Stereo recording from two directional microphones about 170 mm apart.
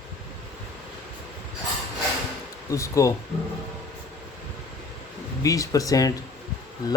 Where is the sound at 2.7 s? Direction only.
20° left (ahead or behind).